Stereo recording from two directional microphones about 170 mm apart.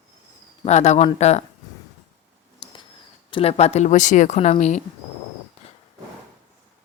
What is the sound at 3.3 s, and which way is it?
Speech, 35° left (ahead or behind).